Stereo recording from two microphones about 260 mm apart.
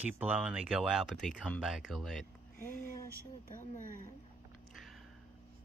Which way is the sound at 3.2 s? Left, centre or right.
Left.